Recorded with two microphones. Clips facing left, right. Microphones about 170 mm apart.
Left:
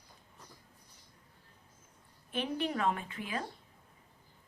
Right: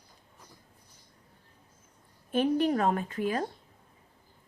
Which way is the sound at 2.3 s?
40° right (ahead or behind).